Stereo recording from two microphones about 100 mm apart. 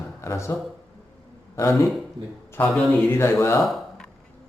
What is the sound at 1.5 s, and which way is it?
Speech, 30° left (ahead or behind).